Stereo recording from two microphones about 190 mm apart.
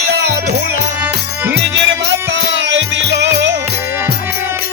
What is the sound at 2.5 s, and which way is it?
Music, 70° right (ahead or behind).